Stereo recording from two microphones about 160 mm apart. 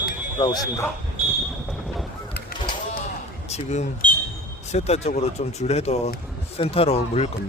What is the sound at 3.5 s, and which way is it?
Speech, 45° left (ahead or behind).